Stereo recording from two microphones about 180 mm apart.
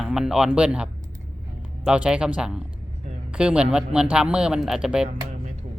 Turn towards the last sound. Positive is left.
turn(degrees=-5)  # may be behind; listen again after turning